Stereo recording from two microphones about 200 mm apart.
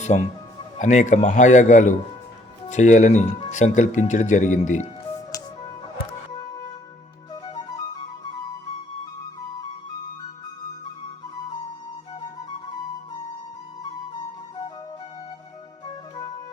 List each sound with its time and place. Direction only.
0.1 s speech: 35° left (ahead or behind)
7.4 s flute: 20° left (ahead or behind)
15.9 s music: 20° left (ahead or behind)